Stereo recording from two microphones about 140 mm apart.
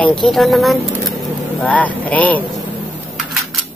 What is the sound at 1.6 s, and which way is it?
Speech, 10° left (ahead or behind).